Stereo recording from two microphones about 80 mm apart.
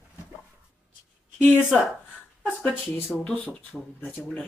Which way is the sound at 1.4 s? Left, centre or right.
Left.